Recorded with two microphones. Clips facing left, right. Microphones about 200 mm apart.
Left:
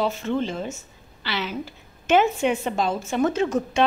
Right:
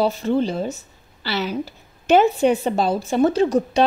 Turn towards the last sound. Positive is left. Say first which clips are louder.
# right 5 dB
turn(degrees=-35)  # may be behind; listen again after turning